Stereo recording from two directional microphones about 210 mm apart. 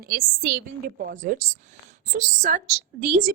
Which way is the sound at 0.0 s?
45° right (ahead or behind).